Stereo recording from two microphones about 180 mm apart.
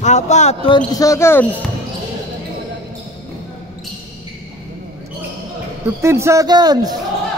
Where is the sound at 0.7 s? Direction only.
20° left (ahead or behind).